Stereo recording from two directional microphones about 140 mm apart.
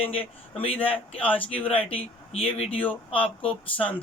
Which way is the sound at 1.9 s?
45° left (ahead or behind).